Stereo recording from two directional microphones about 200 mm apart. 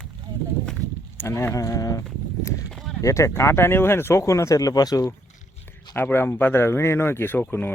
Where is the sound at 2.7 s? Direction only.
Centre (ahead or behind).